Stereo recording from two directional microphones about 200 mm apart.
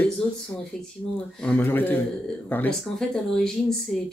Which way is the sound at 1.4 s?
10° left (ahead or behind).